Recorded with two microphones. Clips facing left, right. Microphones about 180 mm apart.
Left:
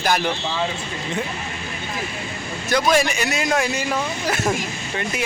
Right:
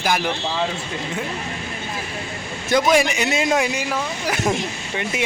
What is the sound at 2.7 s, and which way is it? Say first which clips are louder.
A man's voice: right 2 dB; 20° right (ahead or behind).